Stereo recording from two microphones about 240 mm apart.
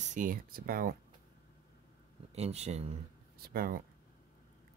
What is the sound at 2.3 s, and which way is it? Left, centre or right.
Speech, right.